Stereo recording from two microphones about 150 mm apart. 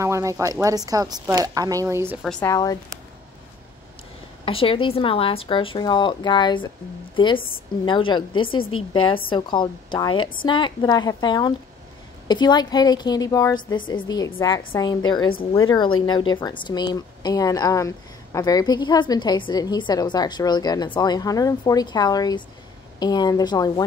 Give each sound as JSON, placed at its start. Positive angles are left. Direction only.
{"t": 0.0, "sound": "speech", "side_deg": -20}
{"t": 2.4, "sound": "a woman's voice", "side_deg": 25}
{"t": 4.5, "sound": "a woman's voice", "side_deg": 35}